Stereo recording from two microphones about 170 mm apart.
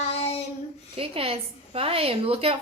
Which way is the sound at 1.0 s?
35° right (ahead or behind).